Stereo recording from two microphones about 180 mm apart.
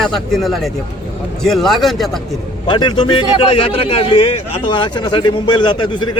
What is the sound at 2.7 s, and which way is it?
A man's voice, 25° left (ahead or behind).